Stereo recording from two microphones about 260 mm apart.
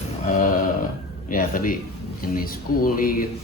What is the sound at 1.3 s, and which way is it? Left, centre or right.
Speech, left.